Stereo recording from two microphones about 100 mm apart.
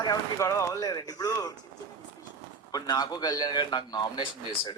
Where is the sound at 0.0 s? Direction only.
35° left (ahead or behind).